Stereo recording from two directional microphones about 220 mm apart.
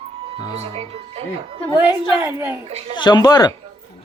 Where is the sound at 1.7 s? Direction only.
10° right (ahead or behind).